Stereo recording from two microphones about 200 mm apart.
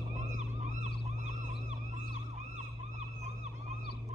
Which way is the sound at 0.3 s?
35° right (ahead or behind).